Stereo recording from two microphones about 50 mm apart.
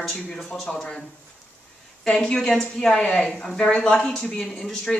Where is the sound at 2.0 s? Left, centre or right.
Centre.